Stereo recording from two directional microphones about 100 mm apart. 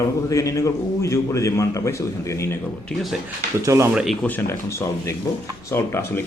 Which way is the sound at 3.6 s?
30° right (ahead or behind).